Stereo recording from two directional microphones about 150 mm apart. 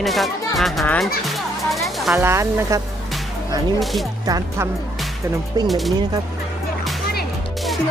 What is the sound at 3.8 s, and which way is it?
Speech, centre (ahead or behind).